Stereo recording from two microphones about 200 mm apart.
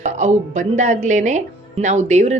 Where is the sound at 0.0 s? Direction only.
35° right (ahead or behind).